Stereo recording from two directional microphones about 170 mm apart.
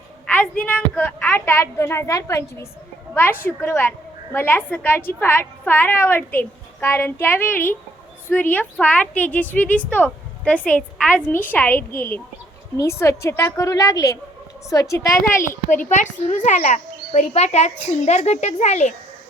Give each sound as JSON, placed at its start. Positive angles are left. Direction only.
{"t": 0.3, "sound": "a woman's voice", "side_deg": 10}
{"t": 15.4, "sound": "speech", "side_deg": 50}